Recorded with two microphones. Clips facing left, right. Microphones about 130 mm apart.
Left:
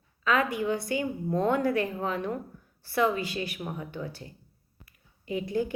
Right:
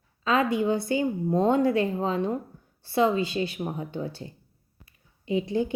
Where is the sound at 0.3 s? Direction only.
25° right (ahead or behind).